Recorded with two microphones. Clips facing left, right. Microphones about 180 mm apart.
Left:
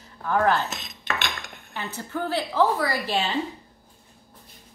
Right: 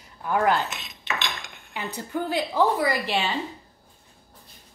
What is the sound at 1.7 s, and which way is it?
Speech, 15° right (ahead or behind).